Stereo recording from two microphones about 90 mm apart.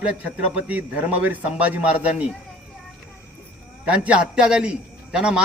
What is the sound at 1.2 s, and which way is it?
Speech, 15° right (ahead or behind).